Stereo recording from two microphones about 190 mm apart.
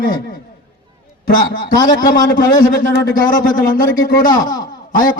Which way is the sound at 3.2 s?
45° left (ahead or behind).